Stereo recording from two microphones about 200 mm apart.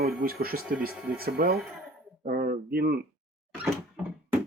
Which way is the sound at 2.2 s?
45° right (ahead or behind).